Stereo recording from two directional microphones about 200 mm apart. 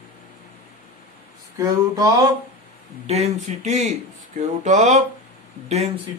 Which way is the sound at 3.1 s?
35° right (ahead or behind).